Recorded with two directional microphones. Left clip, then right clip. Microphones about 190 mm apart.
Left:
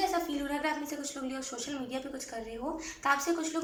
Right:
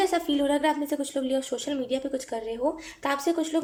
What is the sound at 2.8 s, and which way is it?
Speech, 40° right (ahead or behind).